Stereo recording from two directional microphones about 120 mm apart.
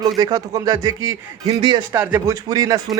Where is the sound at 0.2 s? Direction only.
30° right (ahead or behind).